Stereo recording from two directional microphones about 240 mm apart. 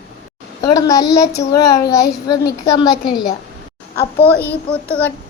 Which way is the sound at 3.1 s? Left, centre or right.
Centre.